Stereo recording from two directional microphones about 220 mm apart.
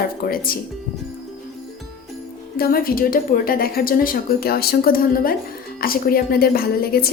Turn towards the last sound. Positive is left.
turn(degrees=45)  # may be behind; listen again after turning